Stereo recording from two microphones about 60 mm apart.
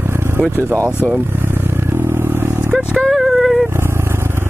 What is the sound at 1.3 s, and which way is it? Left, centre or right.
Vehicle, right.